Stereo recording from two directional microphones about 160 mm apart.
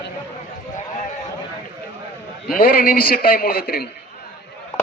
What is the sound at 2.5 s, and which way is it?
A man's voice, 65° left (ahead or behind).